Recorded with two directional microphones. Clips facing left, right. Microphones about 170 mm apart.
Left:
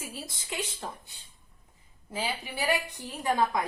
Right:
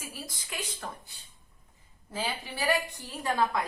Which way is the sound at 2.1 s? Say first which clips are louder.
Left 1 dB; 15° left (ahead or behind).